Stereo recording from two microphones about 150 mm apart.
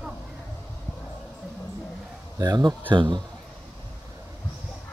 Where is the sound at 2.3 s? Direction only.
25° right (ahead or behind).